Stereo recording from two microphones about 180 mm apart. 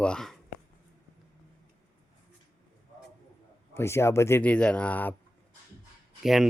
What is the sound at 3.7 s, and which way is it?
Speech, 15° left (ahead or behind).